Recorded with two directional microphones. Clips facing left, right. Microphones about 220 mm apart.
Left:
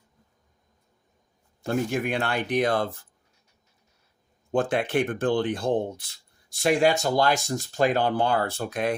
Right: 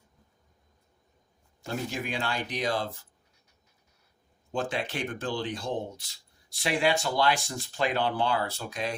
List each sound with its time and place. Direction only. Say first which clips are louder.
1.6 s speech: left 8 dB; 55° left (ahead or behind)
4.5 s speech: left 8 dB; 55° left (ahead or behind)